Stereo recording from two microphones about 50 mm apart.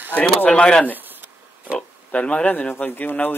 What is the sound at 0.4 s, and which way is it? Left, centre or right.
Speech, left.